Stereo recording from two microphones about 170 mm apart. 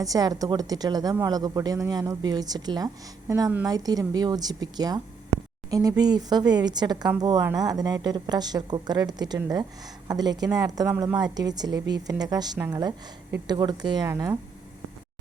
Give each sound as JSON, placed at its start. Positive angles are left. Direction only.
{"t": 0.0, "sound": "a woman's voice", "side_deg": -20}